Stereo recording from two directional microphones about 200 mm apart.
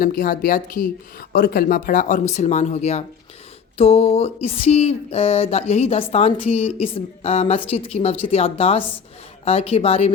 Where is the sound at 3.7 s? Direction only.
30° left (ahead or behind).